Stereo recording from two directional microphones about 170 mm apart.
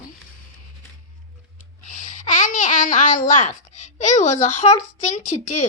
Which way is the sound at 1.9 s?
45° left (ahead or behind).